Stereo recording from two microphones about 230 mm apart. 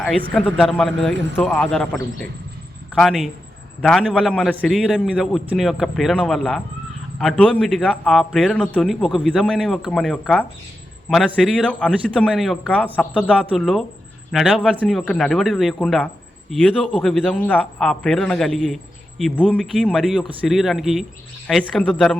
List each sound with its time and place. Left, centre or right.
0.0 s a man's voice: centre